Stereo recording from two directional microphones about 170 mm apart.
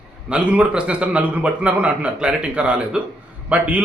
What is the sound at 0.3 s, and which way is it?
A man's voice, 5° right (ahead or behind).